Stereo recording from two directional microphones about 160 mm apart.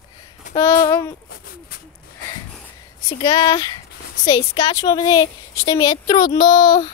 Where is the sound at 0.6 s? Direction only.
20° left (ahead or behind).